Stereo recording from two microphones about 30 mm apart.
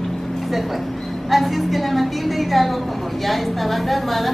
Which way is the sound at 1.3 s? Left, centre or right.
Centre.